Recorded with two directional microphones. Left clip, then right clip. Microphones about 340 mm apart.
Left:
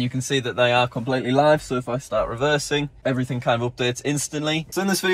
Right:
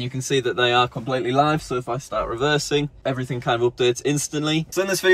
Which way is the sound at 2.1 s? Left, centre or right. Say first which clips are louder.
Left 1 dB; centre.